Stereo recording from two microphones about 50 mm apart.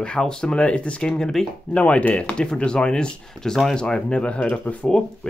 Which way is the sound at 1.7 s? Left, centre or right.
Left.